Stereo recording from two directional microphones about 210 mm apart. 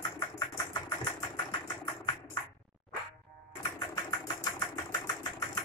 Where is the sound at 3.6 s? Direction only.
20° left (ahead or behind).